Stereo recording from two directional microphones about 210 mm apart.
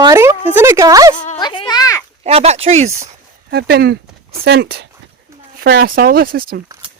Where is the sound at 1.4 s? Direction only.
20° left (ahead or behind).